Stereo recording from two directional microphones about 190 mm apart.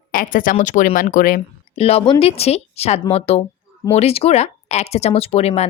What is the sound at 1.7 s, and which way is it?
A woman's voice, 30° left (ahead or behind).